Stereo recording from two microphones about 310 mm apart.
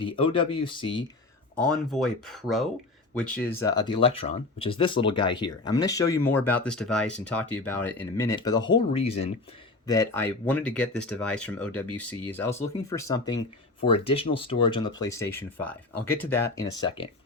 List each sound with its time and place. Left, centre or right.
0.0 s speech: centre
1.9 s speech: centre